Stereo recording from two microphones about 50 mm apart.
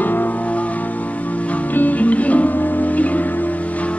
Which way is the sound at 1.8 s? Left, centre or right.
Left.